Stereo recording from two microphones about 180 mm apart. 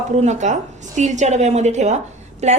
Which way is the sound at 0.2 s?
40° right (ahead or behind).